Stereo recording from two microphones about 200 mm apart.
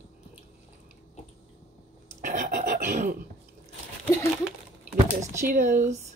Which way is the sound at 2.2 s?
40° right (ahead or behind).